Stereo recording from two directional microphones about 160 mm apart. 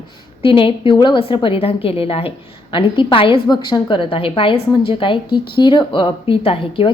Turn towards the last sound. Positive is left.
turn(degrees=35)  # may be behind; listen again after turning